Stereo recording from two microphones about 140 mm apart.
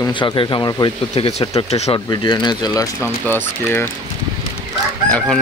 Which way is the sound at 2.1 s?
30° left (ahead or behind).